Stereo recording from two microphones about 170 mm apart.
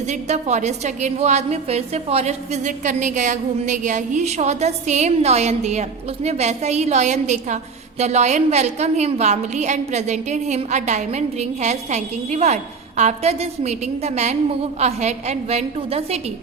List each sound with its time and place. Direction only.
0.1 s a woman's voice: 45° right (ahead or behind)